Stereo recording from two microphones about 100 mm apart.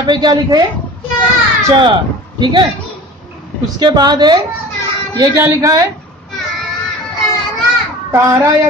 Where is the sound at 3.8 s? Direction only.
45° right (ahead or behind).